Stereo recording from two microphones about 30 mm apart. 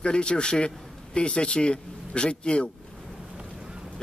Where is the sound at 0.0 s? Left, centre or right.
Left.